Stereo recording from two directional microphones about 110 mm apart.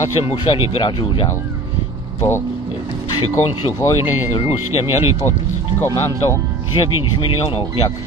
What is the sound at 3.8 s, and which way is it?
Speech, 25° left (ahead or behind).